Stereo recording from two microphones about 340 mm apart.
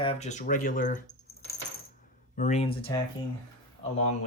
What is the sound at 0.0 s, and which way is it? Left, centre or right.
Speech, centre.